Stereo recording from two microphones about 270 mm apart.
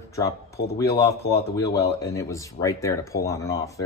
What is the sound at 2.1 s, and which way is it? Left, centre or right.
Speech, centre.